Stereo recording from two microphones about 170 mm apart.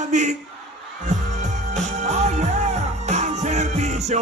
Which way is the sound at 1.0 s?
45° right (ahead or behind).